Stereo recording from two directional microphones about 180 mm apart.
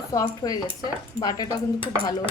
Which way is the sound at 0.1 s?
20° left (ahead or behind).